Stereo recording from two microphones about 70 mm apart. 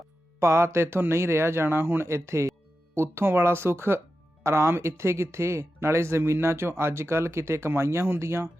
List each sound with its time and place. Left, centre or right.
0.3 s speech: right